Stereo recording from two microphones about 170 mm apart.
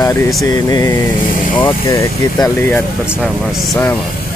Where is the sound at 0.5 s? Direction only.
20° left (ahead or behind).